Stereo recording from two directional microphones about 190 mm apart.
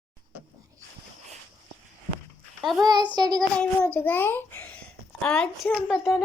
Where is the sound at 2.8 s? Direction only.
20° right (ahead or behind).